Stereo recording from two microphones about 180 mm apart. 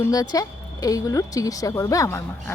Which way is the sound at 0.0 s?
20° left (ahead or behind).